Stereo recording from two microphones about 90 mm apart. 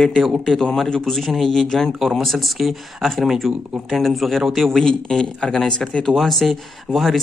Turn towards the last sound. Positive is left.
turn(degrees=0)  # may be behind; listen again after turning